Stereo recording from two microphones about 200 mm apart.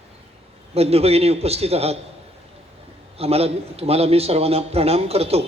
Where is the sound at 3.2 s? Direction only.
30° right (ahead or behind).